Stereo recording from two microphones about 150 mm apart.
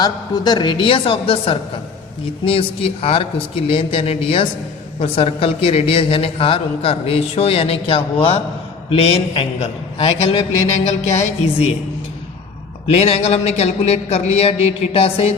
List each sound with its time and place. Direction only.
0.0 s a woman's voice: 25° left (ahead or behind); by 11.7 s 45° left (ahead or behind)
12.9 s a man's voice: 45° left (ahead or behind)